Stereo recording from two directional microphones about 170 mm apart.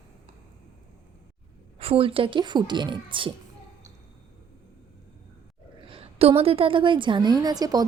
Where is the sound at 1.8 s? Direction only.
35° right (ahead or behind).